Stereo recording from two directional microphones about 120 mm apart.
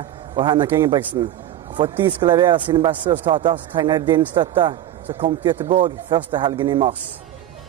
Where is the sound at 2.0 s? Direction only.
40° right (ahead or behind).